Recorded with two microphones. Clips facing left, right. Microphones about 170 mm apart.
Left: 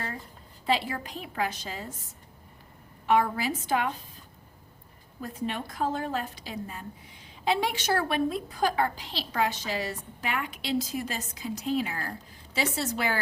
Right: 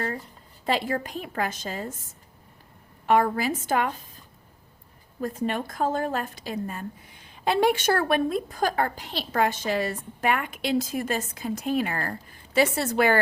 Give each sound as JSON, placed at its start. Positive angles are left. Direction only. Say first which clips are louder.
{"t": 0.6, "sound": "a woman's voice", "louder": "right 2 dB", "side_deg": -50}
{"t": 3.1, "sound": "a woman's voice", "louder": "right 3 dB", "side_deg": -50}
{"t": 5.2, "sound": "a woman's voice", "louder": "right 5 dB", "side_deg": -50}